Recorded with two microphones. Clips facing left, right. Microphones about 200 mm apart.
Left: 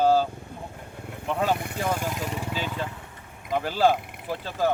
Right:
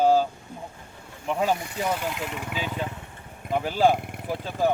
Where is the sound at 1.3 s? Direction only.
10° right (ahead or behind).